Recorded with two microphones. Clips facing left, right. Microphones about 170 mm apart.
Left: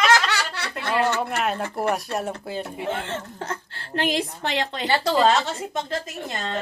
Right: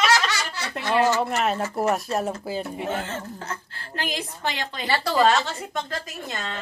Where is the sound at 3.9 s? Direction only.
65° left (ahead or behind).